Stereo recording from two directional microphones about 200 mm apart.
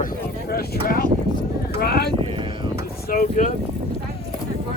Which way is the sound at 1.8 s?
50° left (ahead or behind).